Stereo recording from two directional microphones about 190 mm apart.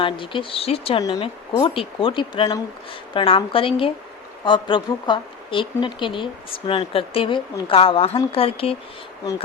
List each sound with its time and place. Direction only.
0.0 s speech: 25° left (ahead or behind)